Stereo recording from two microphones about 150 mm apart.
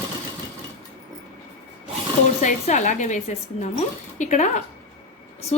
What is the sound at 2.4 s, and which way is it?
A woman's voice, 55° left (ahead or behind).